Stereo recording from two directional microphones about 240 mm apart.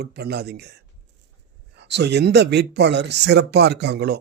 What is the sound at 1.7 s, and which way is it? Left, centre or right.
A man's voice, right.